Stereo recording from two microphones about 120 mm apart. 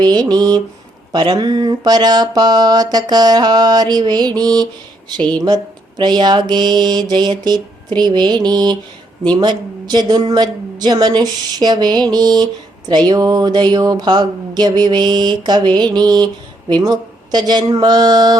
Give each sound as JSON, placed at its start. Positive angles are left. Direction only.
{"t": 0.0, "sound": "speech", "side_deg": -35}